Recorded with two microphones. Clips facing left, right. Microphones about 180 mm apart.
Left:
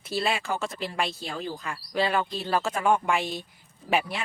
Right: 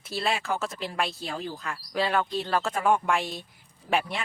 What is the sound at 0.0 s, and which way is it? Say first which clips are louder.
Speech: left 1 dB; centre (ahead or behind).